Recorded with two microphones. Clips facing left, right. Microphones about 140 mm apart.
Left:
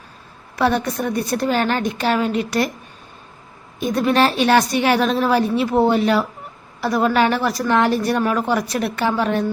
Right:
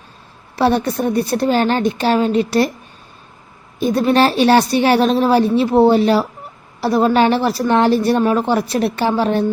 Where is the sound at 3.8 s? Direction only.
35° right (ahead or behind).